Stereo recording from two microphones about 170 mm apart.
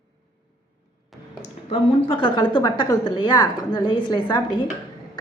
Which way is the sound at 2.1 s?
30° left (ahead or behind).